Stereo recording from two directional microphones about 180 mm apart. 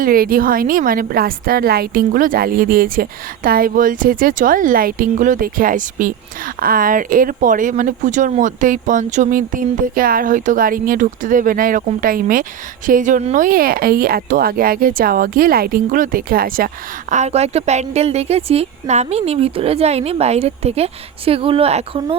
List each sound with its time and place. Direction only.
0.0 s a woman's voice: 55° right (ahead or behind); by 22.2 s 35° right (ahead or behind)